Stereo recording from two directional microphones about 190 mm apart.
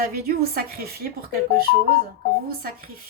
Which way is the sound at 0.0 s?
55° right (ahead or behind).